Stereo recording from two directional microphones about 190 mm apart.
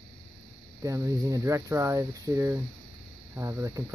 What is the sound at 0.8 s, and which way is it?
Speech, 15° right (ahead or behind).